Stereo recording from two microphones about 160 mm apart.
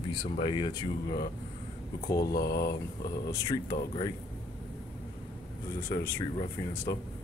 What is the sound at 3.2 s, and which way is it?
Speech, 20° left (ahead or behind).